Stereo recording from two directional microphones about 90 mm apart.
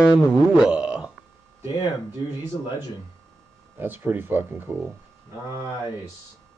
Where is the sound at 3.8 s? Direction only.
20° right (ahead or behind).